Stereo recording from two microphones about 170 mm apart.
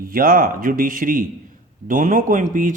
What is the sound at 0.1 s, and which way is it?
Speech, 60° right (ahead or behind).